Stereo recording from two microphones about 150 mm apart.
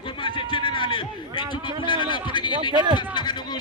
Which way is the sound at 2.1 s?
30° left (ahead or behind).